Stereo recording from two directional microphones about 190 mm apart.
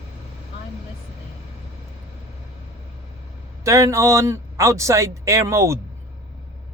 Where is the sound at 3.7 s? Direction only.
15° right (ahead or behind).